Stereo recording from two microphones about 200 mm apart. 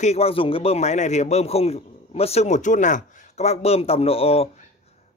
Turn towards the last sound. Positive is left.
turn(degrees=30)  # may be behind; listen again after turning